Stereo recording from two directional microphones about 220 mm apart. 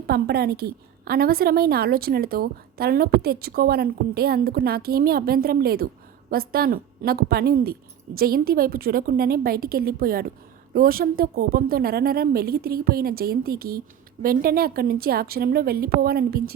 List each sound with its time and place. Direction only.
0.1 s a woman's voice: 45° right (ahead or behind)